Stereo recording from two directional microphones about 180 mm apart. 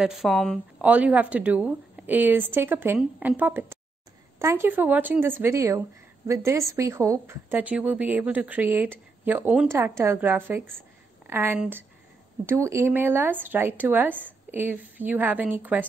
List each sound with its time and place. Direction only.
0.0 s speech: centre (ahead or behind)
0.7 s a woman's voice: 10° right (ahead or behind)